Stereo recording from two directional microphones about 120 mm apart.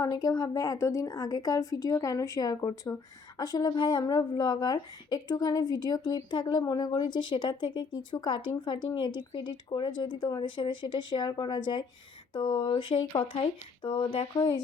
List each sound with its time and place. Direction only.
0.0 s a woman's voice: 30° left (ahead or behind); by 14.5 s 45° left (ahead or behind)